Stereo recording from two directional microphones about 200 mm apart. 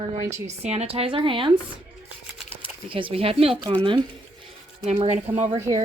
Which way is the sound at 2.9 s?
25° right (ahead or behind).